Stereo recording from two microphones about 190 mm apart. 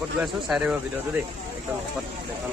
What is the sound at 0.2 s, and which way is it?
Music, 5° right (ahead or behind).